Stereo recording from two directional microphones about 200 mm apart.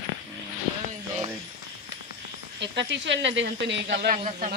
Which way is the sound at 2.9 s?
65° right (ahead or behind).